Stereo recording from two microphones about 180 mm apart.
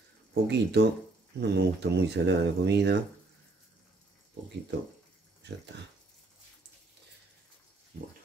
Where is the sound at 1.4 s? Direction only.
70° right (ahead or behind).